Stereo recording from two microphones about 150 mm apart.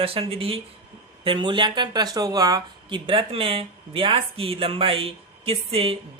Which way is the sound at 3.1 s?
35° right (ahead or behind).